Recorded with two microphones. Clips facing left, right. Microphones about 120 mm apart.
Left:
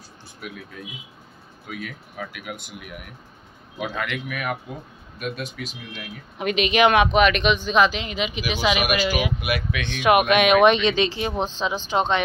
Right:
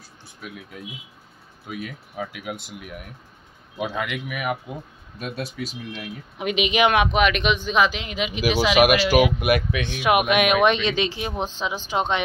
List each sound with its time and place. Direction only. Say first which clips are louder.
1.7 s speech: right 1 dB; 20° right (ahead or behind)
3.7 s speech: right 1 dB; 15° right (ahead or behind)
5.2 s speech: even; 35° right (ahead or behind)
6.3 s speech: left 1 dB; 10° right (ahead or behind)
8.7 s speech: right 6 dB; 90° right
9.4 s speech: right 6 dB; 55° right (ahead or behind)
9.8 s speech: left 3 dB; 10° right (ahead or behind)